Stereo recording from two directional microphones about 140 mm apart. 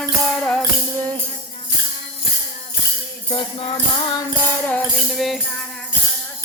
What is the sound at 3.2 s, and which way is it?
Music, 40° left (ahead or behind).